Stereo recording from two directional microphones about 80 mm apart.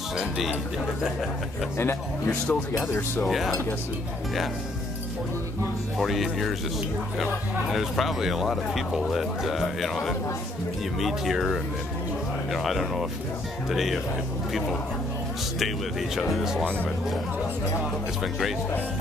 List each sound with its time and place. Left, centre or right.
0.2 s speech: centre
1.8 s a man's voice: left
2.4 s speech: centre
3.3 s speech: centre
5.9 s speech: centre
7.7 s speech: centre
16.2 s speech: centre